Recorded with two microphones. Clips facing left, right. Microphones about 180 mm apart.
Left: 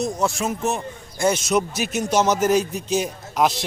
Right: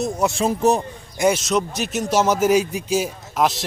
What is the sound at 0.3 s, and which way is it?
Speech, 30° right (ahead or behind).